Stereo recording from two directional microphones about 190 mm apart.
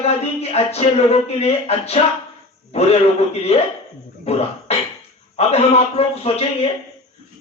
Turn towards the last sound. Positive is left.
turn(degrees=30)  # may be behind; listen again after turning